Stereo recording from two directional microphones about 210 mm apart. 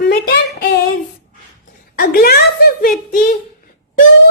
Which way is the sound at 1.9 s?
45° left (ahead or behind).